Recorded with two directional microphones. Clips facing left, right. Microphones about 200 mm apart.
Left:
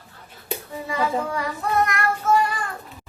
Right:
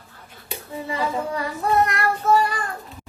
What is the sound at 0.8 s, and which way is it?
Child singing, 30° right (ahead or behind).